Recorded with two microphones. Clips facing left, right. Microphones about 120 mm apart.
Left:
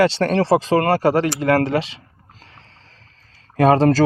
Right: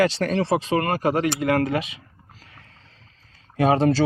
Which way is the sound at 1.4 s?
30° left (ahead or behind).